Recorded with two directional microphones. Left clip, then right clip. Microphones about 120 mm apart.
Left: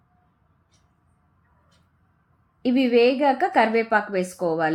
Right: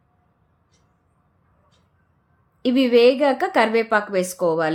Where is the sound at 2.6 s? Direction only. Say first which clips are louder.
Right 3 dB; 30° right (ahead or behind).